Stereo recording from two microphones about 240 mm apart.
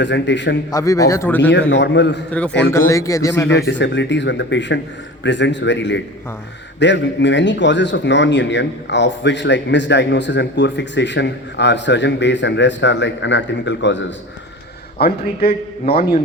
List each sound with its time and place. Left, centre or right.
0.0 s a man's voice: left
0.7 s a man's voice: centre
1.7 s a man's voice: left
2.7 s a man's voice: centre
3.7 s a man's voice: left